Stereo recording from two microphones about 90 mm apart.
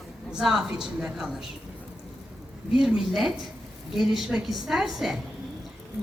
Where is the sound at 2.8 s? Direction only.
5° right (ahead or behind).